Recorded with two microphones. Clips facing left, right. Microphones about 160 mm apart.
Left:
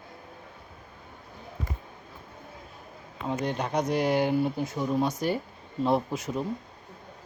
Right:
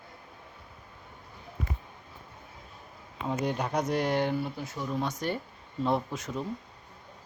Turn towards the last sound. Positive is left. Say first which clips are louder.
# left 4 dB
turn(degrees=5)  # may be behind; listen again after turning